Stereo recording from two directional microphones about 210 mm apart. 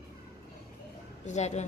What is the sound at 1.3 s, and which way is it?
Speech, 35° left (ahead or behind).